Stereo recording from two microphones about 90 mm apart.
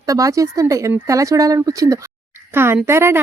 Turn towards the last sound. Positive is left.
turn(degrees=-30)  # may be behind; listen again after turning